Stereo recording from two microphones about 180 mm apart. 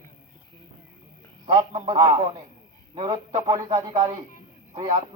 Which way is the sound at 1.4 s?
25° right (ahead or behind).